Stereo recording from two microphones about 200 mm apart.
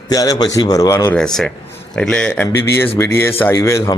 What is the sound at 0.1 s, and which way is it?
A man's voice, 20° left (ahead or behind).